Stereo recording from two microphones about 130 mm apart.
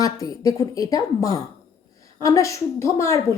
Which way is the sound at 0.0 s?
25° left (ahead or behind).